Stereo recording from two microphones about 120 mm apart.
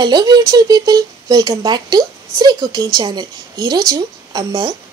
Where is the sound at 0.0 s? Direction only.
35° right (ahead or behind).